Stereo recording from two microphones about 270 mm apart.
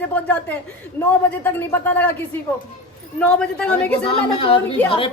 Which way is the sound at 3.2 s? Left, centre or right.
Centre.